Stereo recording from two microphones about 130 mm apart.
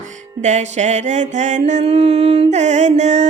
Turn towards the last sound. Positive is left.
turn(degrees=-65)  # may be behind; listen again after turning